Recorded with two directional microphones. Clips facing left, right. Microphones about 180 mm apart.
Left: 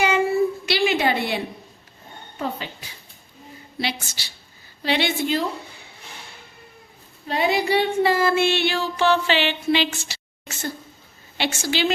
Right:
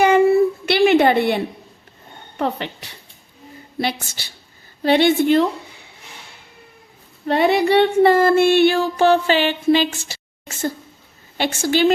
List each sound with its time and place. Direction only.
0.6 s a sound: 55° right (ahead or behind)
2.4 s a woman's voice: 65° right (ahead or behind)
3.8 s child singing: 50° right (ahead or behind)
7.3 s child singing: 60° right (ahead or behind)